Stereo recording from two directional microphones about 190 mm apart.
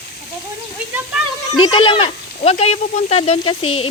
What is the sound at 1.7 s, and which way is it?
Speech, 25° left (ahead or behind).